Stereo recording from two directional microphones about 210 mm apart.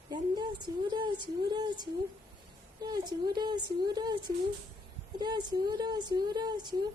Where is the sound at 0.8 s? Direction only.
20° right (ahead or behind).